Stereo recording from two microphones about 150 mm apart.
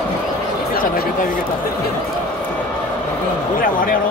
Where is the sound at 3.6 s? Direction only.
70° left (ahead or behind).